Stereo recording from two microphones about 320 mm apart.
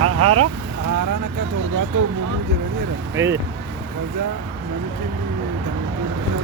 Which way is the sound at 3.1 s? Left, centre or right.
Centre.